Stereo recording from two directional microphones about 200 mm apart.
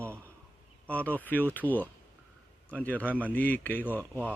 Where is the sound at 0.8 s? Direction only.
5° left (ahead or behind).